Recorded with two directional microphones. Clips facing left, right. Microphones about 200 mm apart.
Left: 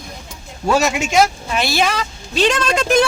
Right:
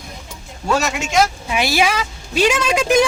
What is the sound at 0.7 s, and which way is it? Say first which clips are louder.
Speech: left 5 dB; 10° left (ahead or behind).